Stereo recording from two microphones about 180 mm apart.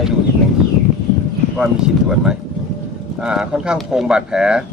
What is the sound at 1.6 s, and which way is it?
Speech, 5° right (ahead or behind).